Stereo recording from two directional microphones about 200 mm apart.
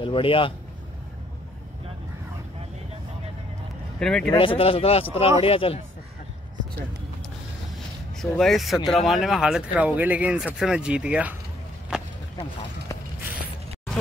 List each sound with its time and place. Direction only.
0.0 s speech: 25° left (ahead or behind)
4.0 s speech: 5° left (ahead or behind)
4.3 s speech: 25° left (ahead or behind)
8.2 s speech: centre (ahead or behind)
11.9 s a sound: 5° right (ahead or behind)